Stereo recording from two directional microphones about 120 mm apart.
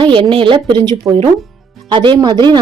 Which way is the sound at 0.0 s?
45° right (ahead or behind).